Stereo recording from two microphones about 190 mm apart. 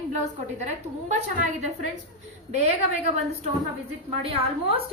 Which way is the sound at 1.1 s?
35° right (ahead or behind).